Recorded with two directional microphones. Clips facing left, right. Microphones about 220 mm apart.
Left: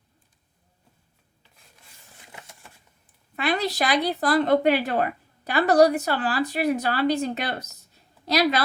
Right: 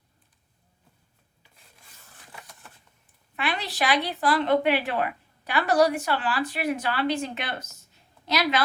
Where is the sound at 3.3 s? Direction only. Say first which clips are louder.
Left 5 dB; 40° left (ahead or behind).